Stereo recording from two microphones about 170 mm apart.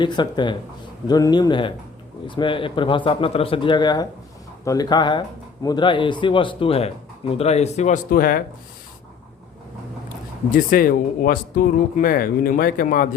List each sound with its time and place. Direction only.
0.0 s a man's voice: 25° left (ahead or behind); by 8.0 s 45° left (ahead or behind)
8.1 s speech: 60° left (ahead or behind)
10.5 s speech: 55° left (ahead or behind)